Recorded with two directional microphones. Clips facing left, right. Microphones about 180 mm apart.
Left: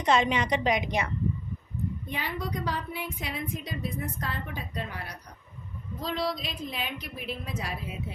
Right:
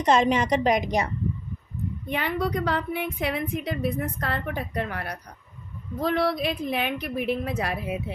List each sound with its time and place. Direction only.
0.0 s a woman's voice: 40° right (ahead or behind)
2.0 s a woman's voice: 65° right (ahead or behind)